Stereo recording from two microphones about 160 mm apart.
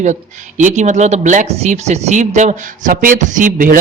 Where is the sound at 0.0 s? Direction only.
50° right (ahead or behind).